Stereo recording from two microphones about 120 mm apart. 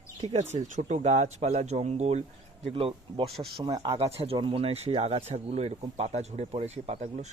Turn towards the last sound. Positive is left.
turn(degrees=-60)  # may be behind; listen again after turning